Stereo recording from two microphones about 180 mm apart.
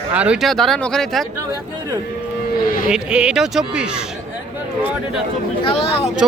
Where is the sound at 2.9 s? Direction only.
5° right (ahead or behind).